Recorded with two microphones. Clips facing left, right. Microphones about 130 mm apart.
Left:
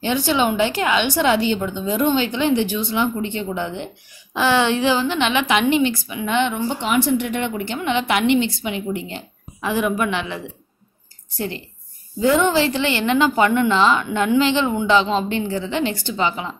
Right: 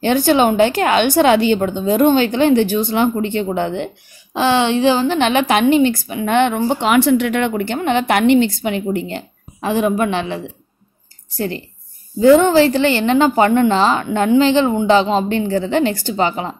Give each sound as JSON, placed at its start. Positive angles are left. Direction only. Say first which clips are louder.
{"t": 0.0, "sound": "a woman's voice", "louder": "right 6 dB", "side_deg": -55}
{"t": 4.3, "sound": "a woman's voice", "louder": "right 3 dB", "side_deg": -30}
{"t": 6.8, "sound": "a woman's voice", "louder": "right 6 dB", "side_deg": -75}
{"t": 9.6, "sound": "a woman's voice", "louder": "right 4 dB", "side_deg": -30}
{"t": 12.2, "sound": "a woman's voice", "louder": "right 7 dB", "side_deg": -40}